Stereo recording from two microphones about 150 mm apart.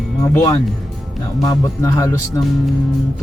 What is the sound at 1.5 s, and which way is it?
Speech, 20° left (ahead or behind).